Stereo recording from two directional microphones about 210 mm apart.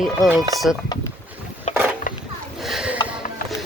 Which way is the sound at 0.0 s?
Centre (ahead or behind).